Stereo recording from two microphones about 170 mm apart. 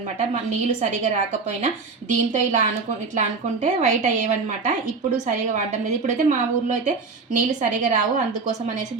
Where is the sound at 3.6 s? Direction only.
45° right (ahead or behind).